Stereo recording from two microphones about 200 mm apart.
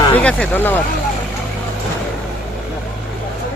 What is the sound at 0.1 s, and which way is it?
Speech, 5° left (ahead or behind).